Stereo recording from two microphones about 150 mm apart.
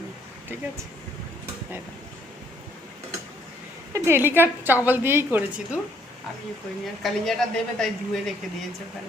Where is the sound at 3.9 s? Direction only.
20° right (ahead or behind).